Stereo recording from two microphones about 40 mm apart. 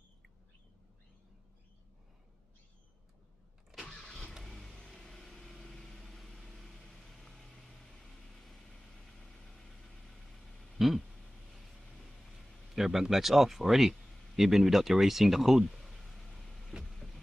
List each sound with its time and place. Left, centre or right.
4.0 s vehicle: centre
4.3 s vehicle: centre
10.8 s a sound: centre
12.3 s speech: centre
13.9 s a sound: centre
14.3 s speech: centre
15.8 s vehicle: centre